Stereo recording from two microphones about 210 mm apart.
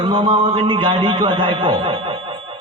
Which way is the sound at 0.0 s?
20° right (ahead or behind).